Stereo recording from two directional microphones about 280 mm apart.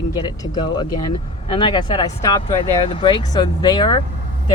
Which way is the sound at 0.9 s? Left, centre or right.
Left.